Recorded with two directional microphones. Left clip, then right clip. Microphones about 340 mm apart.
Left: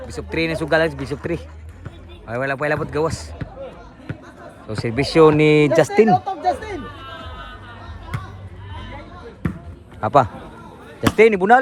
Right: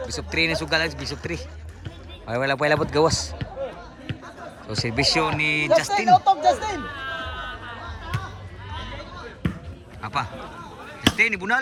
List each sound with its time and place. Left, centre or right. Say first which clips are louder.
0.1 s speech: left 1 dB; centre
4.7 s speech: left 2 dB; centre
6.1 s a sound: right 3 dB; right
7.0 s music: right 4 dB; right
9.4 s basketball bounce: left 3 dB; centre
10.0 s speech: left 12 dB; centre